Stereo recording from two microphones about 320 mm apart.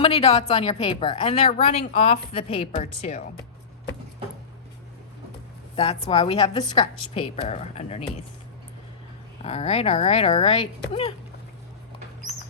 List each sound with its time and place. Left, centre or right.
0.0 s a woman's voice: centre
5.7 s a woman's voice: centre
9.4 s a woman's voice: centre